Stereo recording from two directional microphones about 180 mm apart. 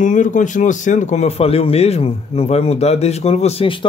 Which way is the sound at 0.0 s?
45° left (ahead or behind).